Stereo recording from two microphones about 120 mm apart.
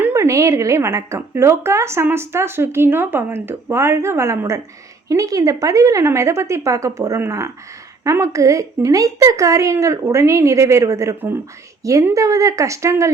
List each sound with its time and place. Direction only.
0.0 s speech: 25° right (ahead or behind)